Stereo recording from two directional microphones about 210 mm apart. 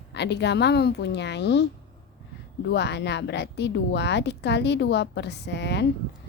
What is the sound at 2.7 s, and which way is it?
A woman's voice, 55° left (ahead or behind).